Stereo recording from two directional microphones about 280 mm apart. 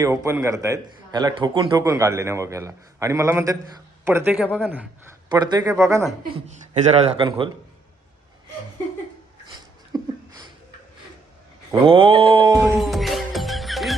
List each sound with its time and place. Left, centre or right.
0.0 s a man's voice: centre
5.3 s a man's voice: centre
6.5 s a man's voice: right
9.6 s a sound: centre
11.7 s a man's voice: centre
12.7 s music: centre